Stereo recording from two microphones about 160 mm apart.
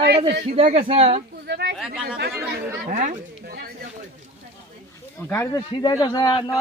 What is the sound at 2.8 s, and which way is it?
Speech, 55° right (ahead or behind).